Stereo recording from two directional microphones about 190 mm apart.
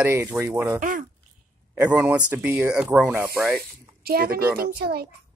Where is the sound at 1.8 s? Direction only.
10° right (ahead or behind).